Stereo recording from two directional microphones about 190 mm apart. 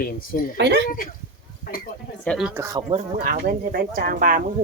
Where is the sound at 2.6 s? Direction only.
20° right (ahead or behind).